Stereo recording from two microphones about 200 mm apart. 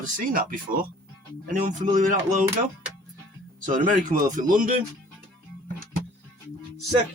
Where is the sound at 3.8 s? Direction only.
40° right (ahead or behind).